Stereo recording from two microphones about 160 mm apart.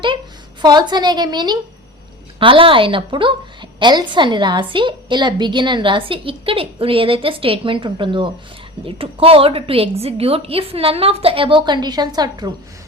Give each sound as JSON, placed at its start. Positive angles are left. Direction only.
{"t": 0.6, "sound": "a woman's voice", "side_deg": -25}